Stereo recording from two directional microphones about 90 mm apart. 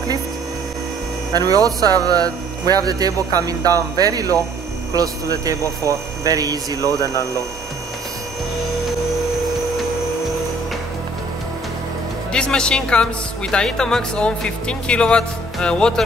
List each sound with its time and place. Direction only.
1.3 s speech: 45° right (ahead or behind)
5.4 s speech: 40° right (ahead or behind)
12.3 s speech: 10° left (ahead or behind)